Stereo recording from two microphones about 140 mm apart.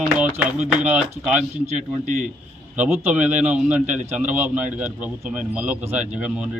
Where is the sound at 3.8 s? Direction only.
60° right (ahead or behind).